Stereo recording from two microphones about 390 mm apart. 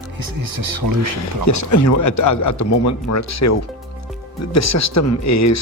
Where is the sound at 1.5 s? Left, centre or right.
Left.